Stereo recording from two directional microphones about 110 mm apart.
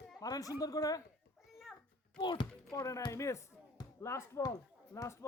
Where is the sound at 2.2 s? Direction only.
45° left (ahead or behind).